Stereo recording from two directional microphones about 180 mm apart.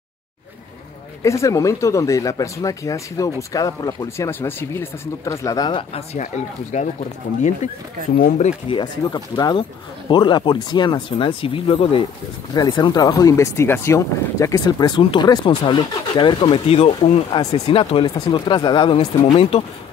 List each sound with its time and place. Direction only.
1.2 s speech: 15° left (ahead or behind)
6.7 s speech: 40° left (ahead or behind)
8.6 s speech: 25° left (ahead or behind)